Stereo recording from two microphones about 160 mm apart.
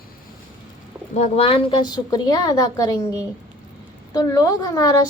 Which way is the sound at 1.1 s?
40° left (ahead or behind).